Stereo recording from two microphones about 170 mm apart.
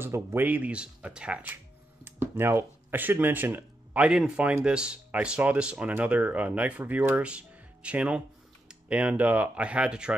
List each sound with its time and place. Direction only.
0.0 s speech: 15° right (ahead or behind)